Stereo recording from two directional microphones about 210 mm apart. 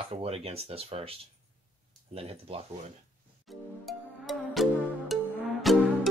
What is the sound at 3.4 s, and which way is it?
Music, centre (ahead or behind).